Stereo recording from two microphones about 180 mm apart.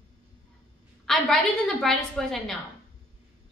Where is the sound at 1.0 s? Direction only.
Centre (ahead or behind).